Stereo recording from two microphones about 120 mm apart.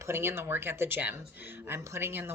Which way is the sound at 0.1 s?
20° right (ahead or behind).